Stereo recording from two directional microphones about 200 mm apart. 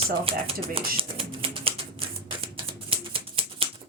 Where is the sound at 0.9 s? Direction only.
25° right (ahead or behind).